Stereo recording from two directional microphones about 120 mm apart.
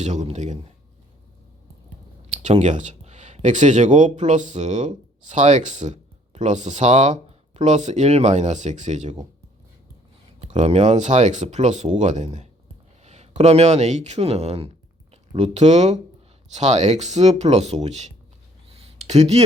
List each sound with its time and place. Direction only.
0.0 s speech: 75° right (ahead or behind)
2.3 s speech: 70° right (ahead or behind)
10.4 s speech: 70° right (ahead or behind)
18.7 s a sound: 60° right (ahead or behind)